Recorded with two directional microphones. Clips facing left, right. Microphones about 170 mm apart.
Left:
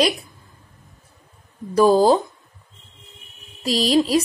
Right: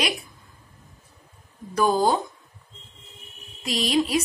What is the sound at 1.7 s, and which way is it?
Speech, 30° left (ahead or behind).